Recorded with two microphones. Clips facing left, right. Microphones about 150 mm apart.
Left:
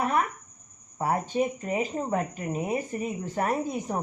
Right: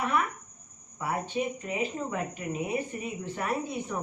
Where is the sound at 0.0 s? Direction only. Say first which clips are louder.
Left 3 dB; 40° left (ahead or behind).